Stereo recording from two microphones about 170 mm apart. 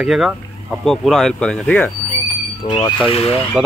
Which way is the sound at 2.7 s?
25° left (ahead or behind).